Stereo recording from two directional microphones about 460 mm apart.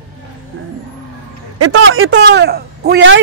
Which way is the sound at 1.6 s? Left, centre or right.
Right.